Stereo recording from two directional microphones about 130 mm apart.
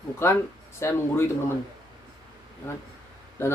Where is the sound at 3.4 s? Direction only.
20° left (ahead or behind).